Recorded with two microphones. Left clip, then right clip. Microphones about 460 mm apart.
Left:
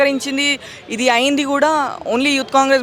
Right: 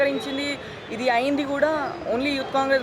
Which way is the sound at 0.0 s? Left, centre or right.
Left.